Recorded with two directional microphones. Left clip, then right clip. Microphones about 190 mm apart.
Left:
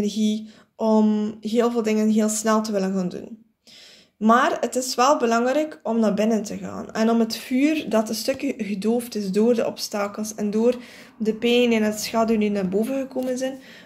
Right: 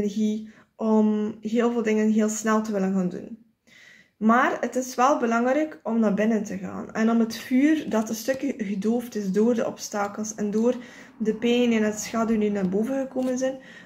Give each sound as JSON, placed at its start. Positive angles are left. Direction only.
{"t": 0.0, "sound": "speech", "side_deg": 30}
{"t": 4.2, "sound": "speech", "side_deg": 30}